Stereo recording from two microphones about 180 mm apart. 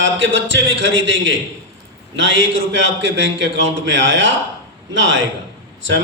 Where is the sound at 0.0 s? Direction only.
90° right.